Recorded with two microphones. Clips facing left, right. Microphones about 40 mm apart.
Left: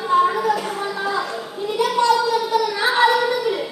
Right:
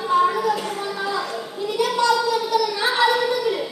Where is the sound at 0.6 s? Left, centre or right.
Left.